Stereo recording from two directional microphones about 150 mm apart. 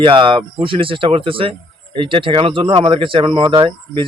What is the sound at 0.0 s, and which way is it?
Speech, 35° right (ahead or behind).